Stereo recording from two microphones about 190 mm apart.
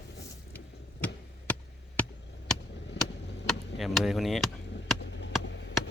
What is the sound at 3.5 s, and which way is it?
Chop, centre (ahead or behind).